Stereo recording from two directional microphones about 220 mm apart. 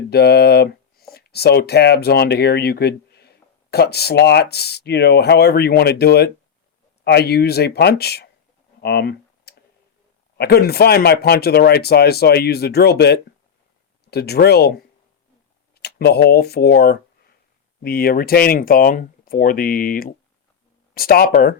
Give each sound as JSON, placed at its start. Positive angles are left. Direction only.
{"t": 0.1, "sound": "speech", "side_deg": 45}
{"t": 8.8, "sound": "clicking", "side_deg": 45}
{"t": 10.3, "sound": "speech", "side_deg": 45}
{"t": 15.7, "sound": "speech", "side_deg": 45}